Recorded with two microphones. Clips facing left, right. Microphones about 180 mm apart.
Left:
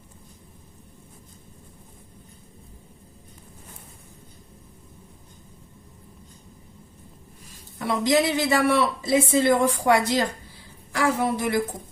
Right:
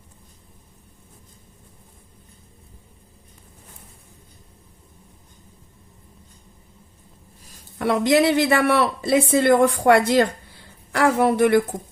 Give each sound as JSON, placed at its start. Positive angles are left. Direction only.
{"t": 7.8, "sound": "speech", "side_deg": -60}